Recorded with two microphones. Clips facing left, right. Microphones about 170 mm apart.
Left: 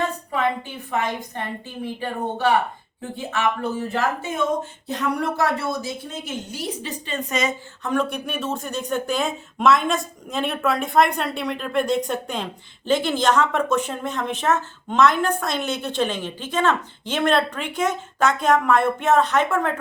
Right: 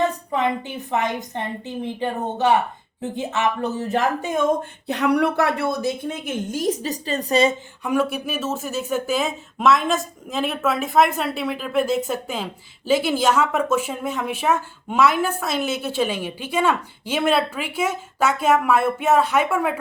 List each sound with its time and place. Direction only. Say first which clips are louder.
0.0 s a sound: right 2 dB; 20° right (ahead or behind)
0.9 s a woman's voice: right 1 dB; 20° right (ahead or behind)
4.9 s a woman's voice: right 5 dB; 70° right (ahead or behind); by 7.5 s 35° right (ahead or behind)
7.9 s speech: right 2 dB; 5° right (ahead or behind)